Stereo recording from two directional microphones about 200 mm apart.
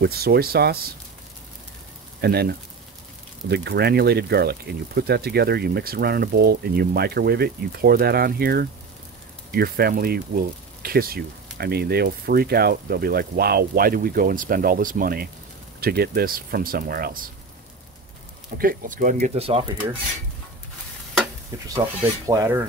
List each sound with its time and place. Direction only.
0.0 s speech: 50° right (ahead or behind)
2.2 s speech: 50° right (ahead or behind)
18.6 s speech: 45° right (ahead or behind)
19.2 s speech: 30° right (ahead or behind)
21.6 s rub: 15° right (ahead or behind)